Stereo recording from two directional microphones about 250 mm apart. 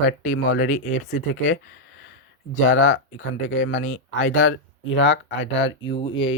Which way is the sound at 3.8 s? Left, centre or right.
Left.